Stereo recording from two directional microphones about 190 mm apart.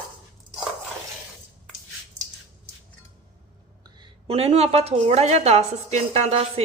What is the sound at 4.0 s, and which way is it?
A woman's voice, 30° right (ahead or behind).